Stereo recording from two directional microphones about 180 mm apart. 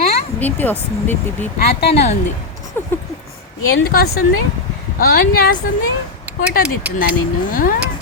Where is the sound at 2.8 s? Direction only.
10° left (ahead or behind).